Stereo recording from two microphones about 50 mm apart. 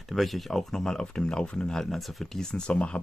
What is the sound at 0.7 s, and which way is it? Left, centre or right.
Speech, centre.